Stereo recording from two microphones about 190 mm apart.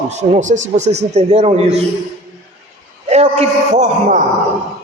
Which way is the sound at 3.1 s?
35° right (ahead or behind).